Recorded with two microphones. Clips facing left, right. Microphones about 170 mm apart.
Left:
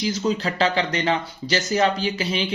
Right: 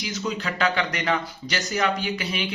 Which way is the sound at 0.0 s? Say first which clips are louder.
Left 6 dB; 30° left (ahead or behind).